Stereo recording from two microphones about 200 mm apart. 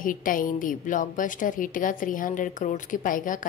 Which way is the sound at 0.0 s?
45° left (ahead or behind).